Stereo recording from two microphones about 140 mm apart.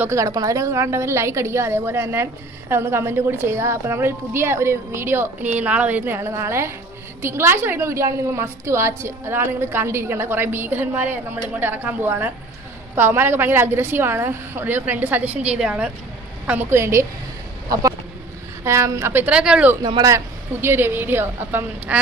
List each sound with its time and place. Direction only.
0.0 s a woman's voice: 20° right (ahead or behind)
18.6 s a woman's voice: 20° right (ahead or behind)
19.8 s a woman's voice: 25° right (ahead or behind)